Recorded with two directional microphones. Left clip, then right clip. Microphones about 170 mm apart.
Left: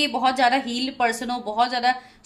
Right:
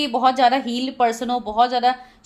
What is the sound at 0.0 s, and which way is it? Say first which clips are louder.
A woman's voice: right 3 dB; 40° right (ahead or behind).